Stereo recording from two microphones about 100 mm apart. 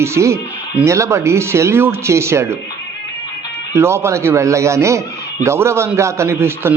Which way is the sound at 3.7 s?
25° right (ahead or behind).